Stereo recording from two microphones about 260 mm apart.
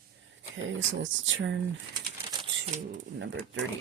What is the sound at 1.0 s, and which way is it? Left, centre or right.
Speech, right.